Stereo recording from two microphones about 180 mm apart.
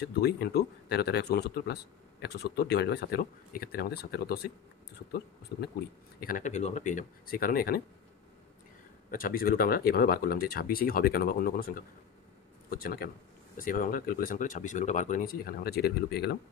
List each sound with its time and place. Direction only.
0.0 s speech: 65° left (ahead or behind)
5.5 s speech: 55° left (ahead or behind)
9.1 s speech: 55° left (ahead or behind)